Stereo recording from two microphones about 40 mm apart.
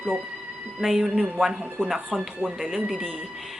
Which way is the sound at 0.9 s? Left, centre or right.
Centre.